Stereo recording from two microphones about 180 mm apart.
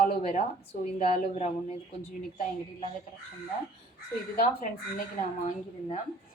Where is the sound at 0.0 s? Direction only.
45° left (ahead or behind).